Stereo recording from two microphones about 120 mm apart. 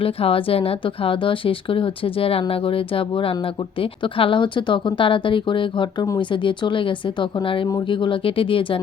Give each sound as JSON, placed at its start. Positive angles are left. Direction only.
{"t": 0.0, "sound": "speech", "side_deg": 50}